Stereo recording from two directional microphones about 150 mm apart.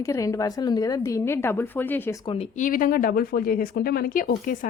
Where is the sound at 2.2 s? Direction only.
35° left (ahead or behind).